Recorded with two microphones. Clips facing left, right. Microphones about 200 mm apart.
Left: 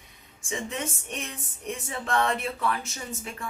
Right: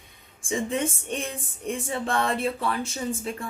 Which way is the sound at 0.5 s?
30° right (ahead or behind).